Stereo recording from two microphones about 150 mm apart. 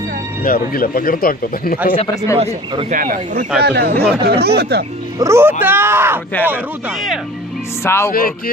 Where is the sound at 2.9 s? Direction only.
70° right (ahead or behind).